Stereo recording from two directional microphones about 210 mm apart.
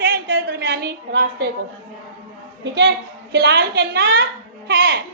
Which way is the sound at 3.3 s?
55° right (ahead or behind).